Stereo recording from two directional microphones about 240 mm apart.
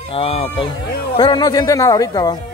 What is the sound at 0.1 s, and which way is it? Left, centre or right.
Speech, left.